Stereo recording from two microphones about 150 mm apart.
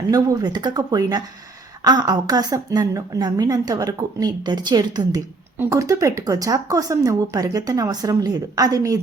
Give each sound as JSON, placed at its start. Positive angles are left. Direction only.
{"t": 0.1, "sound": "a woman's voice", "side_deg": -25}